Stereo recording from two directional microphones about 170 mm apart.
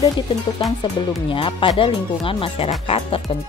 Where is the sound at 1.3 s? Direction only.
30° left (ahead or behind).